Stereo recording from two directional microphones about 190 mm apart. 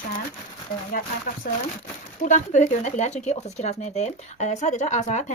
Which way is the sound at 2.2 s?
40° left (ahead or behind).